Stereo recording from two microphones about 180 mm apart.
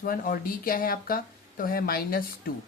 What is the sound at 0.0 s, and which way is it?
Speech, 50° left (ahead or behind).